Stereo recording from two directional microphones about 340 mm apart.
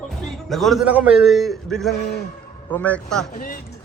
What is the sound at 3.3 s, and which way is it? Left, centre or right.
Speech, left.